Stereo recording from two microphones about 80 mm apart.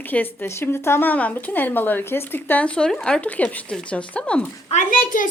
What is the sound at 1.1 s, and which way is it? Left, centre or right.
A woman's voice, centre.